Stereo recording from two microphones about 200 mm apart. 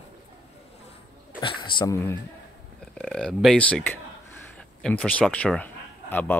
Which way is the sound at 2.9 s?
5° left (ahead or behind).